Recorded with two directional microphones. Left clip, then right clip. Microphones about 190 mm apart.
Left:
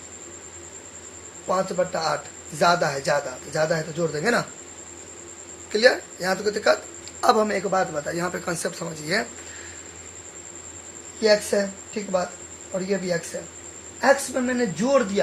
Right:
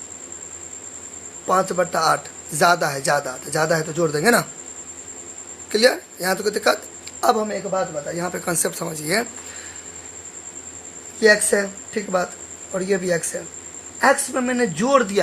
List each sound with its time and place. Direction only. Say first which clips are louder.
1.5 s a man's voice: right 4 dB; 35° right (ahead or behind)
5.7 s a man's voice: right 1 dB; 30° right (ahead or behind)
7.3 s a man's voice: left 1 dB; centre (ahead or behind)
8.3 s speech: right 4 dB; 25° right (ahead or behind)
11.2 s a man's voice: right 4 dB; 40° right (ahead or behind)
12.7 s a man's voice: right 4 dB; 35° right (ahead or behind)